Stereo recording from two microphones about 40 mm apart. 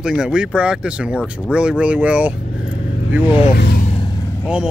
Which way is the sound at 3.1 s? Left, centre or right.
Right.